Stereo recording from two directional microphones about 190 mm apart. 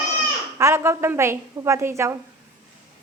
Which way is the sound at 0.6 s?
15° right (ahead or behind).